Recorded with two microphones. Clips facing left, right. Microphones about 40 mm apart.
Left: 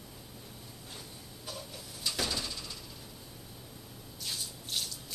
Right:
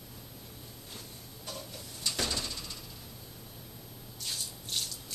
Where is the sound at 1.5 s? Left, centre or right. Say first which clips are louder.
Right 1 dB; centre.